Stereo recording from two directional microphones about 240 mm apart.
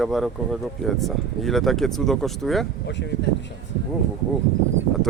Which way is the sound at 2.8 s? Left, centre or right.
Left.